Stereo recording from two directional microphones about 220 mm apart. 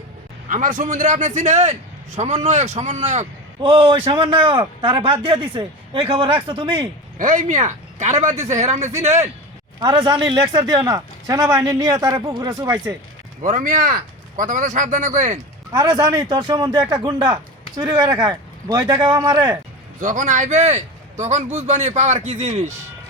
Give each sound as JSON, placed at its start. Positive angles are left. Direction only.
{"t": 0.4, "sound": "a man's voice", "side_deg": -35}
{"t": 7.2, "sound": "a man's voice", "side_deg": -35}
{"t": 13.4, "sound": "a man's voice", "side_deg": -35}
{"t": 15.7, "sound": "a man's voice", "side_deg": -15}
{"t": 20.0, "sound": "a man's voice", "side_deg": -35}